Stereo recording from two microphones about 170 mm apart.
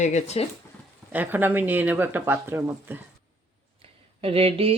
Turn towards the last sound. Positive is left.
turn(degrees=-35)  # may be behind; listen again after turning